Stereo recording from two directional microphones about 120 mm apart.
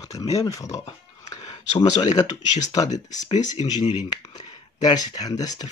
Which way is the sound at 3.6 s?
65° left (ahead or behind).